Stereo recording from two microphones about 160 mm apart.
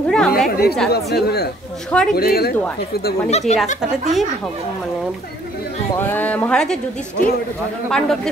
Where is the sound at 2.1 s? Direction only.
75° left (ahead or behind).